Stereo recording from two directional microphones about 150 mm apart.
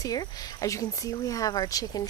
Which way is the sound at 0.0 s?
25° left (ahead or behind).